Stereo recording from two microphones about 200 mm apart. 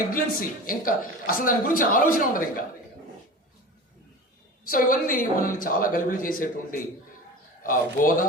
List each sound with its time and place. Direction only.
0.1 s speech: 45° left (ahead or behind)
4.7 s speech: 45° left (ahead or behind)